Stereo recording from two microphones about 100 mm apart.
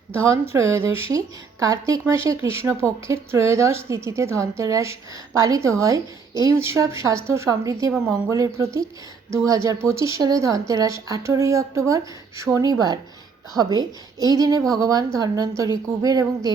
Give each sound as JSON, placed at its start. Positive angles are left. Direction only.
{"t": 0.3, "sound": "a woman's voice", "side_deg": -25}